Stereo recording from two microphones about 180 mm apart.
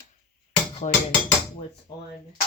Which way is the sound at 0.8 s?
35° left (ahead or behind).